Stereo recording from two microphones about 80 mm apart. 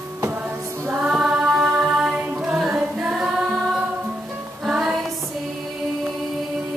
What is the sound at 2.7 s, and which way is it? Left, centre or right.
Singing, centre.